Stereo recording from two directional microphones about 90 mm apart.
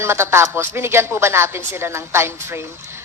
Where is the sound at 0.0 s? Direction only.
30° right (ahead or behind).